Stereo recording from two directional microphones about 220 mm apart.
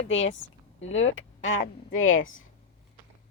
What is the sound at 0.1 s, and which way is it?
Speech, 60° left (ahead or behind).